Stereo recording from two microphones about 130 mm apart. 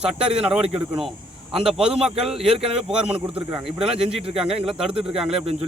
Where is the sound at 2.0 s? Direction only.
5° right (ahead or behind).